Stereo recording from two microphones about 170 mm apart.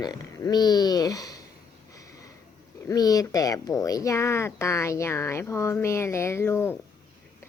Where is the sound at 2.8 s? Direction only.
20° left (ahead or behind).